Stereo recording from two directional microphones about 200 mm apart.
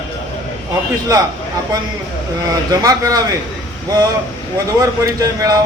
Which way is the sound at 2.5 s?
15° right (ahead or behind).